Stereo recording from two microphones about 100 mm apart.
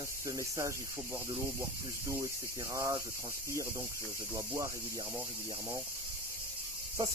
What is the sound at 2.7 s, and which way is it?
Speech, 30° right (ahead or behind).